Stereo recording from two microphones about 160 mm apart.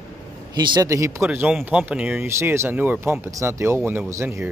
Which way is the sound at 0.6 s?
25° right (ahead or behind).